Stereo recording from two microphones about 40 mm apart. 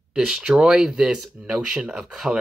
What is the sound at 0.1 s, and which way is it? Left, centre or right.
Speech, centre.